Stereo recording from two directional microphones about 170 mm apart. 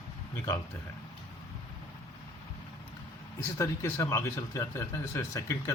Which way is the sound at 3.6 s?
15° left (ahead or behind).